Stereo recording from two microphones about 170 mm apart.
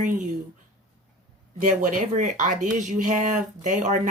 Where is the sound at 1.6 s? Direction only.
50° right (ahead or behind).